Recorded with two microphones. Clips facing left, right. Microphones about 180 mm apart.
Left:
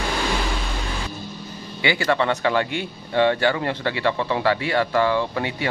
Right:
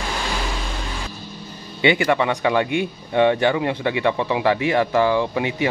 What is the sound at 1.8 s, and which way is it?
Speech, 20° right (ahead or behind).